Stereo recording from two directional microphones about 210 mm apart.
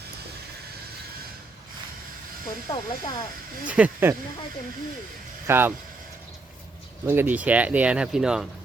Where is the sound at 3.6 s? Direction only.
5° right (ahead or behind).